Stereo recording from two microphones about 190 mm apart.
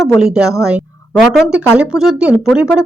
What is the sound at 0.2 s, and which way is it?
Speech, 5° right (ahead or behind).